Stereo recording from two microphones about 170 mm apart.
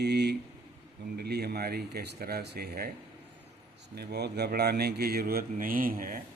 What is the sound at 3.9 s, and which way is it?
Speech, 70° right (ahead or behind).